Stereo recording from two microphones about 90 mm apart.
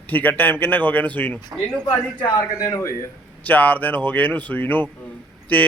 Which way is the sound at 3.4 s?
15° left (ahead or behind).